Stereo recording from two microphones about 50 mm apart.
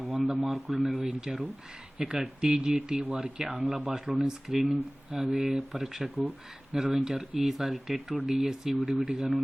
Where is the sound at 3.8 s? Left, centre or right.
Centre.